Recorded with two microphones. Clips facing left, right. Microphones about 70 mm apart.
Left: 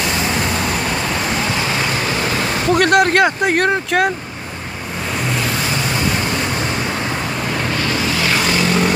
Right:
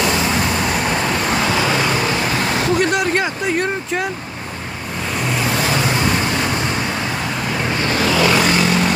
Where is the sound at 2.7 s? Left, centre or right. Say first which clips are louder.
Left 7 dB; left.